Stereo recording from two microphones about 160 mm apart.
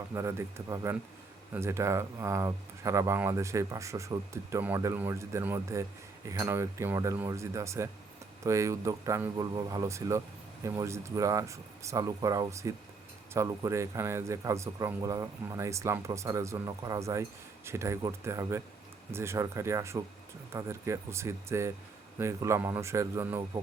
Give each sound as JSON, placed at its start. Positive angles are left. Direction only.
{"t": 0.1, "sound": "speech", "side_deg": -20}